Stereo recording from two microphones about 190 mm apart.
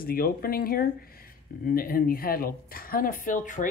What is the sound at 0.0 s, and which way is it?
Speech, 50° left (ahead or behind).